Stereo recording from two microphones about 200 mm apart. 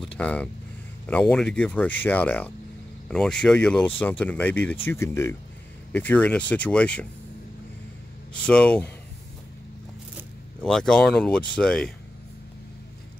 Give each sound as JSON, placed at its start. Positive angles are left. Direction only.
{"t": 0.2, "sound": "speech", "side_deg": 5}
{"t": 8.3, "sound": "speech", "side_deg": 5}
{"t": 10.6, "sound": "speech", "side_deg": 0}